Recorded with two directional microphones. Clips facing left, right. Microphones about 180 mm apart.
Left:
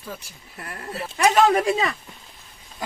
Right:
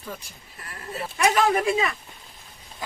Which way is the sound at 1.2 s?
35° left (ahead or behind).